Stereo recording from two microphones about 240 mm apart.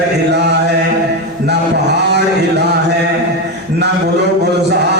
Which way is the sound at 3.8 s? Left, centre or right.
Right.